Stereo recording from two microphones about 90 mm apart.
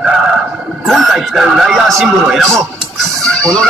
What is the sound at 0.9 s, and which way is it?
Speech, centre (ahead or behind).